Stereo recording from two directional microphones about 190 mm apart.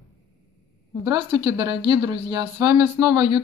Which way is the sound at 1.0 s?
25° right (ahead or behind).